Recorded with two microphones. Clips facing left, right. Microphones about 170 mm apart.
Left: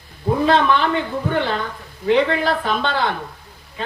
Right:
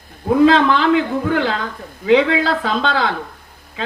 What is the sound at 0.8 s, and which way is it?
A woman's voice, 90° right.